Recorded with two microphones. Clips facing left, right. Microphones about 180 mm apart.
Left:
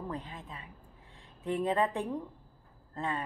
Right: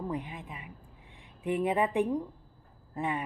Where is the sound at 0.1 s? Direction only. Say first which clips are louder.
Right 4 dB; 15° right (ahead or behind).